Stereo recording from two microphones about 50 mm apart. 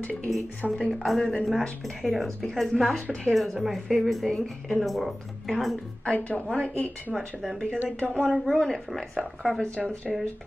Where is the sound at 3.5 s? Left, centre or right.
Centre.